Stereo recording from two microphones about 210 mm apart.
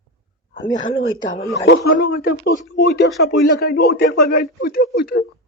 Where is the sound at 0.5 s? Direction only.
60° left (ahead or behind).